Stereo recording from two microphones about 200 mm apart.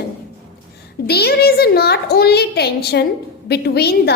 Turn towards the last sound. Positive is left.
turn(degrees=55)  # may be behind; listen again after turning